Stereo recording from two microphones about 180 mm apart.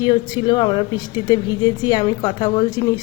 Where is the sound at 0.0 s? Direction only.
25° left (ahead or behind).